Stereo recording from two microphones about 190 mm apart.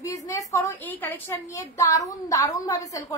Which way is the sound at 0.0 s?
15° left (ahead or behind).